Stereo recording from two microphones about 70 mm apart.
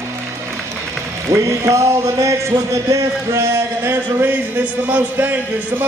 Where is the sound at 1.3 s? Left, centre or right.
Right.